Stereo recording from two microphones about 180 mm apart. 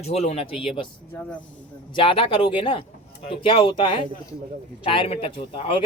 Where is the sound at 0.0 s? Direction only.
35° left (ahead or behind).